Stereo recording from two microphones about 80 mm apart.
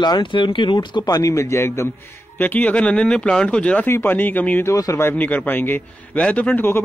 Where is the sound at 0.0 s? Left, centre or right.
Left.